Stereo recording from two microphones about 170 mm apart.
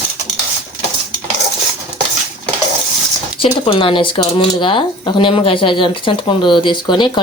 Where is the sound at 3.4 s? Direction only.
30° left (ahead or behind).